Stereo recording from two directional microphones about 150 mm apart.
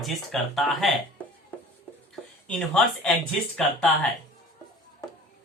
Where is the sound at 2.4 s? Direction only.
5° left (ahead or behind).